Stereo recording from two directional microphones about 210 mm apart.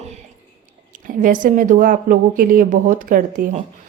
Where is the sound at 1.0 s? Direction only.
40° right (ahead or behind).